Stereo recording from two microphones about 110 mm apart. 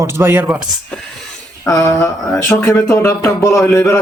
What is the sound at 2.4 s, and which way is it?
Speech, 25° left (ahead or behind).